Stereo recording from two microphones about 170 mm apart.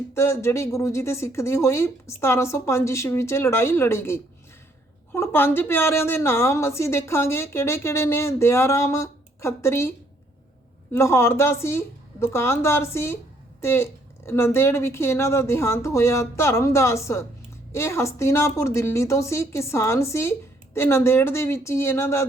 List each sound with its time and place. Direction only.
0.1 s a woman's voice: 15° left (ahead or behind)
10.9 s a woman's voice: 15° left (ahead or behind)